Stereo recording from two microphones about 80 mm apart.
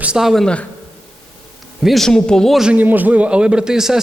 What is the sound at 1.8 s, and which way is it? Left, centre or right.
Speech, centre.